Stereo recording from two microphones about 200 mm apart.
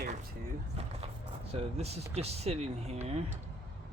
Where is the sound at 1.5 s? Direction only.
30° right (ahead or behind).